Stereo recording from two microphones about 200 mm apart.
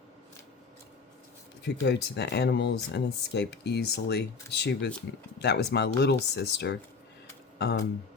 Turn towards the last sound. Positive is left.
turn(degrees=55)  # may be behind; listen again after turning